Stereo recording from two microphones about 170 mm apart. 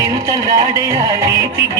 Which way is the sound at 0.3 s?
15° right (ahead or behind).